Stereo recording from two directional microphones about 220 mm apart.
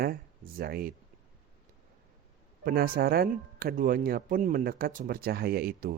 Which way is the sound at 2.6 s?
45° right (ahead or behind).